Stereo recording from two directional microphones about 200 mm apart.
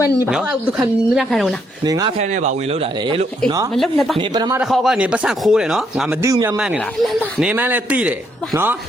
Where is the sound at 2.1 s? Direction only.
35° right (ahead or behind).